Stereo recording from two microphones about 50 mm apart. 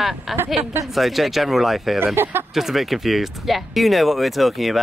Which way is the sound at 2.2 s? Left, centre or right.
Right.